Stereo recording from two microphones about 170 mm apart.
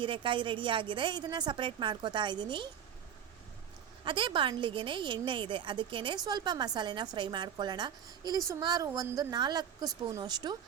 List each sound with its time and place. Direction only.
0.0 s a woman's voice: 30° right (ahead or behind)
4.0 s a woman's voice: 30° right (ahead or behind)